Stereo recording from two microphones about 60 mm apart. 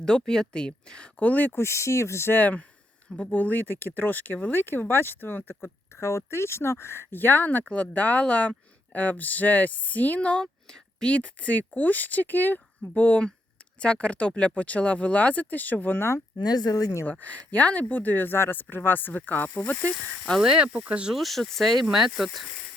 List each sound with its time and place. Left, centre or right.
0.0 s speech: centre; by 1.5 s left
1.5 s speech: left
2.3 s speech: left
3.1 s speech: centre
3.3 s speech: left
7.6 s speech: centre
7.9 s speech: left
16.0 s speech: left
16.7 s speech: left
17.1 s speech: left
20.1 s speech: centre
20.4 s speech: centre
20.7 s speech: right
21.2 s speech: centre